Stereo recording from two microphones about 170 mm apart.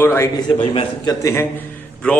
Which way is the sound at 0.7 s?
30° left (ahead or behind).